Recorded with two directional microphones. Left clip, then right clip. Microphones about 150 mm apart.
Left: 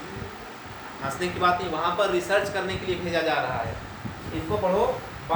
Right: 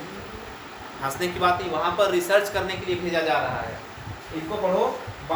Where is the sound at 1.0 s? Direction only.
25° right (ahead or behind).